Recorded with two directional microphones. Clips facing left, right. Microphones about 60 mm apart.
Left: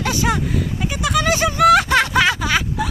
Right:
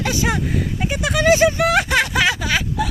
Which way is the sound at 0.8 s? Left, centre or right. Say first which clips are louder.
Right 3 dB; right.